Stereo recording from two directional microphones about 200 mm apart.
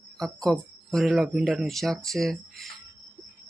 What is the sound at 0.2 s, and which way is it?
Speech, 5° left (ahead or behind).